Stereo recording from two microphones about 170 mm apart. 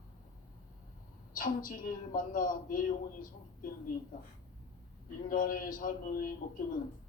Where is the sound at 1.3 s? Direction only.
55° left (ahead or behind).